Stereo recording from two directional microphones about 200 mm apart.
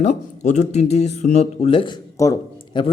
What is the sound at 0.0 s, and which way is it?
Speech, 35° left (ahead or behind).